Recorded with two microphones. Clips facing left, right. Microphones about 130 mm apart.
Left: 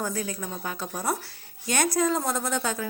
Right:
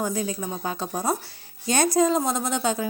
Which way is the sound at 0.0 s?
20° right (ahead or behind).